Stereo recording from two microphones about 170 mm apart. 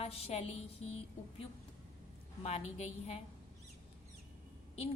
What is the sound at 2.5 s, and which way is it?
Speech, 40° left (ahead or behind).